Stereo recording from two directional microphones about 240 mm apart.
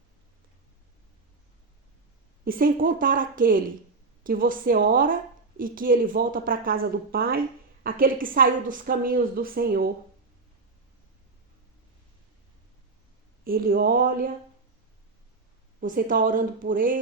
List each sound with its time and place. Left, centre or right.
2.4 s a woman's voice: right
13.4 s a woman's voice: right
15.8 s a woman's voice: right